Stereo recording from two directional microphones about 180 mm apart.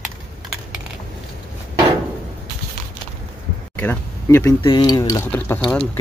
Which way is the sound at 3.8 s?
10° left (ahead or behind).